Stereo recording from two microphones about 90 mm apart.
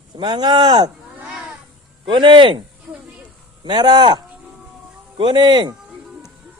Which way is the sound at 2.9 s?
Centre (ahead or behind).